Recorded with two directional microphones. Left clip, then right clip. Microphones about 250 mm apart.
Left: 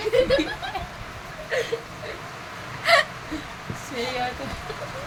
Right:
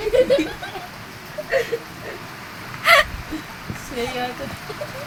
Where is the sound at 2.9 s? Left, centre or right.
Centre.